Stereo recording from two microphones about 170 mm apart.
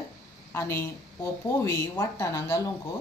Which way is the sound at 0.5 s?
15° left (ahead or behind).